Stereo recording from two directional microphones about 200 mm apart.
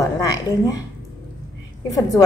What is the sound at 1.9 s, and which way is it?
Speech, 15° left (ahead or behind).